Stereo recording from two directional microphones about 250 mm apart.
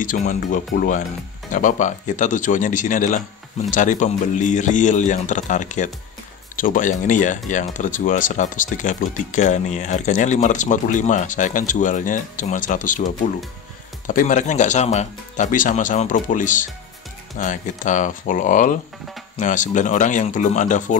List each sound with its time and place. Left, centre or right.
0.0 s speech: left